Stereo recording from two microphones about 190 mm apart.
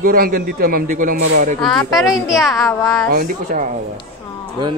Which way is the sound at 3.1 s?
50° right (ahead or behind).